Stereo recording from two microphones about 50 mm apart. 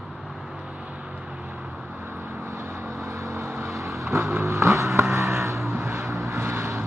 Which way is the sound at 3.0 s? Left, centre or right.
Right.